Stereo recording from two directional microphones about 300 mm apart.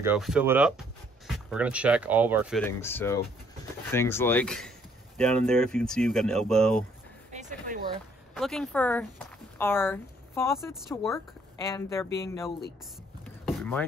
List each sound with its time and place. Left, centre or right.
0.0 s speech: centre
7.3 s a sound: right
8.4 s speech: centre
13.2 s chopping: centre